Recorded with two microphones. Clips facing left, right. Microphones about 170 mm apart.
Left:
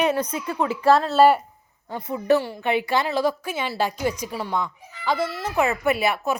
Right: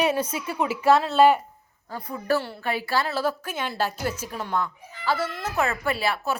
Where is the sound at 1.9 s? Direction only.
20° left (ahead or behind).